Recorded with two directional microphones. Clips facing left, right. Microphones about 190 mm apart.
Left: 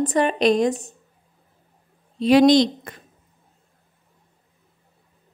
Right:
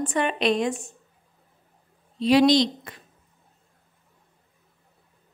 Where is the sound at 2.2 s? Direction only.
50° left (ahead or behind).